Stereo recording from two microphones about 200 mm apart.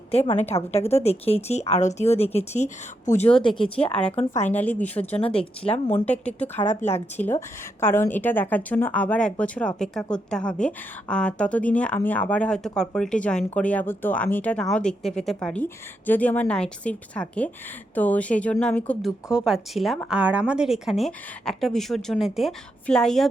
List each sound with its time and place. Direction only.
0.1 s a woman's voice: 30° left (ahead or behind)
3.4 s speech: 25° left (ahead or behind)
3.9 s a woman's voice: 5° left (ahead or behind)
5.2 s speech: 30° left (ahead or behind)
5.9 s a woman's voice: 5° left (ahead or behind)
6.6 s speech: 35° left (ahead or behind)
6.9 s a woman's voice: 10° left (ahead or behind)
19.3 s speech: 5° right (ahead or behind)